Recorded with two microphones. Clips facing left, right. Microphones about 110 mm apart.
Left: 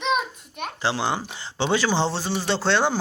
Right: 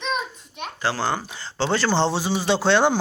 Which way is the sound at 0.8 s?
25° left (ahead or behind).